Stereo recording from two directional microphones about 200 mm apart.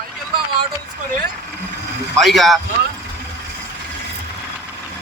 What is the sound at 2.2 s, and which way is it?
Speech, centre (ahead or behind).